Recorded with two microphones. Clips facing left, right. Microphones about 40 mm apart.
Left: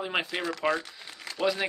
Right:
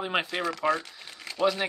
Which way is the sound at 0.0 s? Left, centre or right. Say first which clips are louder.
Right 2 dB; centre.